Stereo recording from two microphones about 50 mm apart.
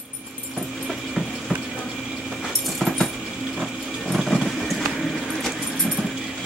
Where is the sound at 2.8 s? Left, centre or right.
Centre.